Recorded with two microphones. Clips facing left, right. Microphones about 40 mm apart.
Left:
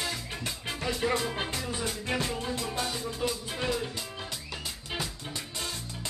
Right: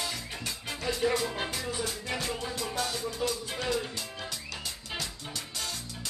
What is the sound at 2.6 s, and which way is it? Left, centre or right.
Music, centre.